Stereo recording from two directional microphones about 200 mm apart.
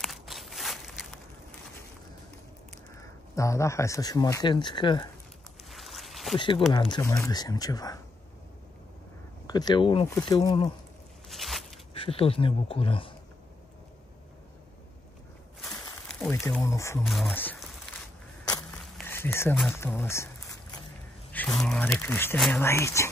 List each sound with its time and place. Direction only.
0.0 s walk: centre (ahead or behind)
3.0 s speech: 15° left (ahead or behind)
5.7 s a sound: centre (ahead or behind)
6.3 s speech: 25° left (ahead or behind)
9.5 s speech: 20° left (ahead or behind)
11.2 s a sound: centre (ahead or behind)
11.9 s speech: 30° left (ahead or behind)
15.6 s a sound: 5° left (ahead or behind)
16.3 s speech: 15° left (ahead or behind)
17.0 s speech: centre (ahead or behind)
19.0 s speech: 10° left (ahead or behind)